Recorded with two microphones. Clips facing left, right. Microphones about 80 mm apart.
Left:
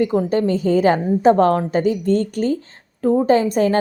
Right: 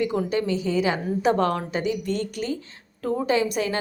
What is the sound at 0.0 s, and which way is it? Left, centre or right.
A woman's voice, left.